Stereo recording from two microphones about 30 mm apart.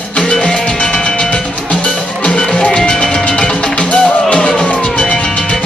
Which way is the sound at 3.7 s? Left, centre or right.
Left.